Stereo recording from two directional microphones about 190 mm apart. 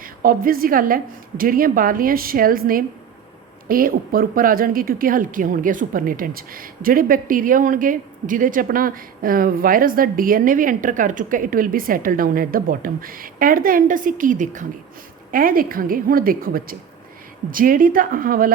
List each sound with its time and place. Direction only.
0.0 s a woman's voice: 50° right (ahead or behind)